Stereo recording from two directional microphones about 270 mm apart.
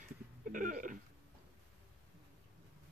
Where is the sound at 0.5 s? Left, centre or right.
Right.